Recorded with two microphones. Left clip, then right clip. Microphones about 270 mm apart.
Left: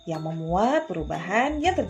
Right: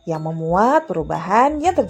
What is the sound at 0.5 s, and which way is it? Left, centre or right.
Speech, right.